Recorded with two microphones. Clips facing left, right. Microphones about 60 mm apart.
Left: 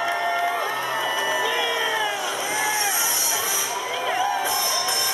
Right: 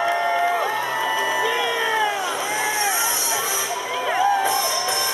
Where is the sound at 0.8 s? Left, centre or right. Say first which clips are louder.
Right 2 dB; centre.